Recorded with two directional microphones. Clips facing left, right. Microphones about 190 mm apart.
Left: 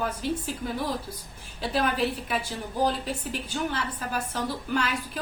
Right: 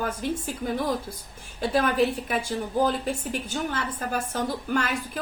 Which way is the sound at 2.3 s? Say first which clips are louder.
Right 4 dB; 45° right (ahead or behind).